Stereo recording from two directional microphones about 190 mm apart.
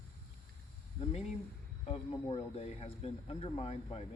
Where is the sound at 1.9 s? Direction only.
30° left (ahead or behind).